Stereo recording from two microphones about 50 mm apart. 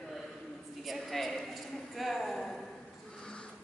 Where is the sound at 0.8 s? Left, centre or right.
Centre.